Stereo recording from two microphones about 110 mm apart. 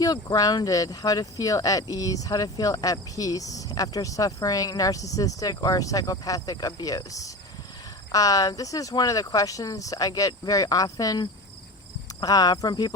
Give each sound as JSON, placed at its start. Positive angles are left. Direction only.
{"t": 0.0, "sound": "speech", "side_deg": 35}